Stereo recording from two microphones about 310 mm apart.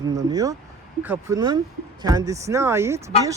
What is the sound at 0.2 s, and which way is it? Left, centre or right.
Speech, centre.